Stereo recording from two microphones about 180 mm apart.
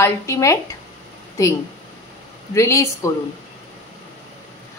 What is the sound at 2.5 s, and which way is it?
Speech, 15° left (ahead or behind).